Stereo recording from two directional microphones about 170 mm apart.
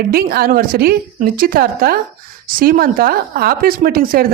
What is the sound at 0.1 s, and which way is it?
A woman's voice, 60° right (ahead or behind).